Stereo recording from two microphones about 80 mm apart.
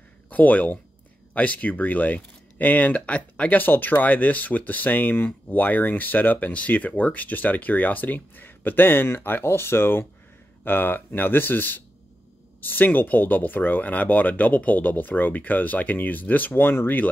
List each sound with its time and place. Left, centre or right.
0.3 s speech: centre